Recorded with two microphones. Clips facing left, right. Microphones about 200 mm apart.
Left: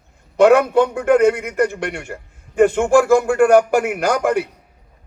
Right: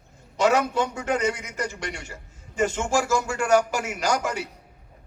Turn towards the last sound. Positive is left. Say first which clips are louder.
# left 8 dB
turn(degrees=55)  # may be behind; listen again after turning